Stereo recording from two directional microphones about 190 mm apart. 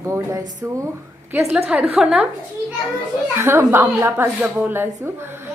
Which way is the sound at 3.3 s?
15° right (ahead or behind).